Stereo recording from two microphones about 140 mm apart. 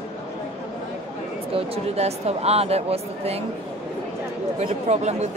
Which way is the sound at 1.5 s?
45° right (ahead or behind).